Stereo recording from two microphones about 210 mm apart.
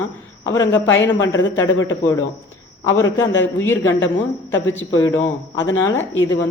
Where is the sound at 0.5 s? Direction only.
15° left (ahead or behind).